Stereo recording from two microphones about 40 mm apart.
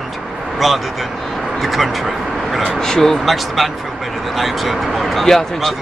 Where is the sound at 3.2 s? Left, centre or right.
Centre.